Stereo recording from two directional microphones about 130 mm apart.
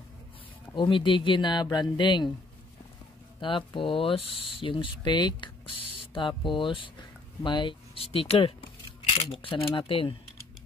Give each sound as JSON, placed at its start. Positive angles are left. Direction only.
{"t": 0.7, "sound": "speech", "side_deg": 40}
{"t": 3.3, "sound": "speech", "side_deg": 40}